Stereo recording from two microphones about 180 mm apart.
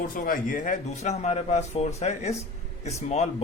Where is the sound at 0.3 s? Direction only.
45° left (ahead or behind).